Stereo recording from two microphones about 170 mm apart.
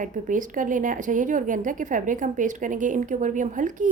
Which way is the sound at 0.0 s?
50° right (ahead or behind).